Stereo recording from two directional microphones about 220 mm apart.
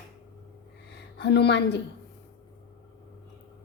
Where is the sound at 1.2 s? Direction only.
50° left (ahead or behind).